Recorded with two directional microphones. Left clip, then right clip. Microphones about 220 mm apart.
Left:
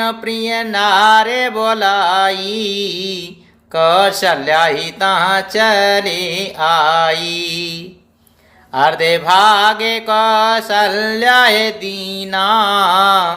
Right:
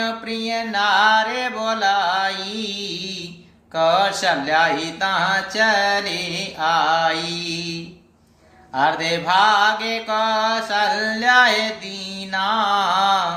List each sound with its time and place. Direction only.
0.0 s mantra: 45° left (ahead or behind)